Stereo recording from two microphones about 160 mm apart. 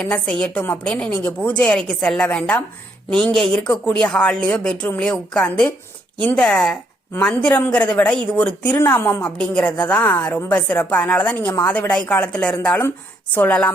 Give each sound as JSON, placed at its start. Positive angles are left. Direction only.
{"t": 0.0, "sound": "a woman's voice", "side_deg": 5}